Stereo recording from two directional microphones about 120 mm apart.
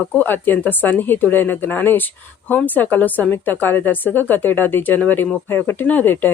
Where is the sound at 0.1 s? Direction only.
15° left (ahead or behind).